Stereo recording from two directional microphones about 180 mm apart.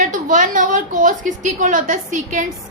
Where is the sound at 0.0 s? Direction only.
45° right (ahead or behind).